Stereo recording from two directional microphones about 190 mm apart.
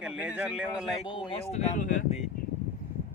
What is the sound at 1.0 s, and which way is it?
Speech, 25° left (ahead or behind).